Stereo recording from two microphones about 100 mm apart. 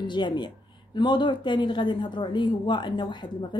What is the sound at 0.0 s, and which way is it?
A woman's voice, 50° left (ahead or behind).